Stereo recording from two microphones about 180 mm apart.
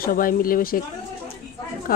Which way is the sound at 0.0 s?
50° left (ahead or behind).